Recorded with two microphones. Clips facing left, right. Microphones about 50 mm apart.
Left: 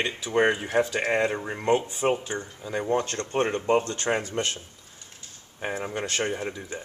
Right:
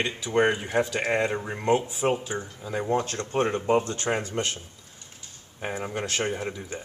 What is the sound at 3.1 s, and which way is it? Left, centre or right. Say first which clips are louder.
Speech: even; centre.